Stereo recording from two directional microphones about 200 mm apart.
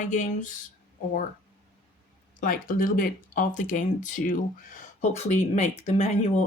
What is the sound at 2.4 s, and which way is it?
Speech, 45° left (ahead or behind).